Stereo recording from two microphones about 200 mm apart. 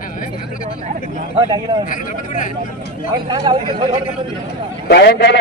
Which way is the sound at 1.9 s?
40° left (ahead or behind).